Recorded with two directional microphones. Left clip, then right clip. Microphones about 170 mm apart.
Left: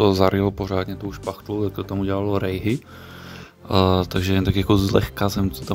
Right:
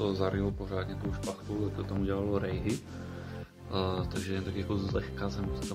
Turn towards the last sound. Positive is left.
turn(degrees=90)